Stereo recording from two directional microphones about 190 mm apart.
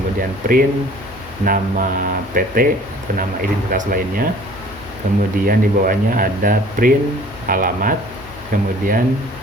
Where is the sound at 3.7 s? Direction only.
50° right (ahead or behind).